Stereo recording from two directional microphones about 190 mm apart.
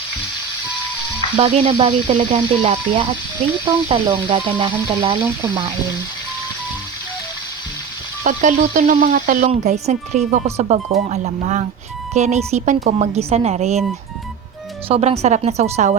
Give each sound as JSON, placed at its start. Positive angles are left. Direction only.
{"t": 1.4, "sound": "speech", "side_deg": -30}
{"t": 8.2, "sound": "speech", "side_deg": -40}
{"t": 14.8, "sound": "speech", "side_deg": -30}